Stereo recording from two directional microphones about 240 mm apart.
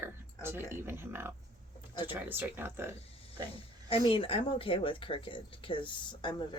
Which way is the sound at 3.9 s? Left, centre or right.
Left.